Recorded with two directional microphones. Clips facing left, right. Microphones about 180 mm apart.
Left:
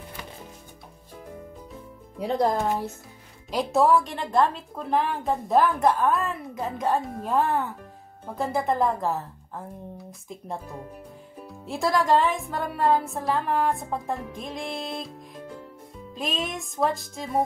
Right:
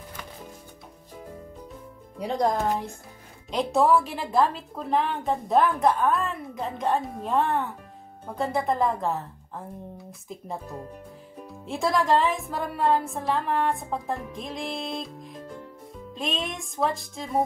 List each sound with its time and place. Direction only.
2.1 s a woman's voice: centre (ahead or behind)